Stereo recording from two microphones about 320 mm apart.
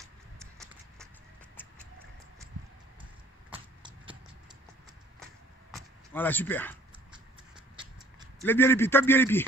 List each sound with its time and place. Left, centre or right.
3.5 s a sound: centre
6.1 s speech: centre
7.7 s horse: centre
8.4 s a man's voice: centre